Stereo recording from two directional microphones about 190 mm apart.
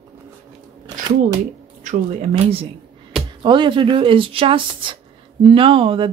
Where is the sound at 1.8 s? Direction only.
35° right (ahead or behind).